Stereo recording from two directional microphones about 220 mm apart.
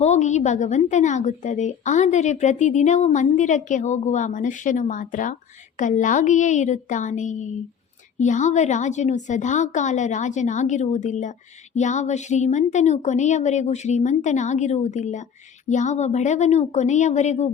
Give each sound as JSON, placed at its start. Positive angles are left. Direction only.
{"t": 0.0, "sound": "a woman's voice", "side_deg": 30}